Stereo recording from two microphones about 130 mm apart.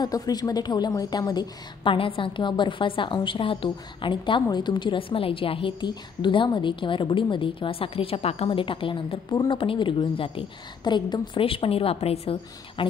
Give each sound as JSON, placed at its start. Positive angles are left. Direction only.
{"t": 0.0, "sound": "a woman's voice", "side_deg": 30}
{"t": 9.3, "sound": "a woman's voice", "side_deg": 30}
{"t": 9.6, "sound": "a woman's voice", "side_deg": 40}